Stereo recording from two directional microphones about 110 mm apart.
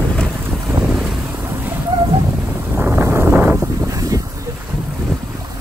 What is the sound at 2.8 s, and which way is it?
Wind noise, 20° right (ahead or behind).